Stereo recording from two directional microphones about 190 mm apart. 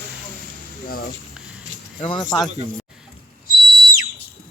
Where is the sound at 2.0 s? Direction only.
25° left (ahead or behind).